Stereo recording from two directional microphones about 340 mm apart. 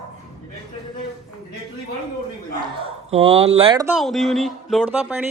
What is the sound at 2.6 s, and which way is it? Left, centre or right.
Speech, centre.